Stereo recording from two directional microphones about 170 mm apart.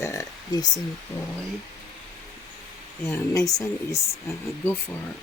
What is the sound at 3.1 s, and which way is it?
Speech, 15° left (ahead or behind).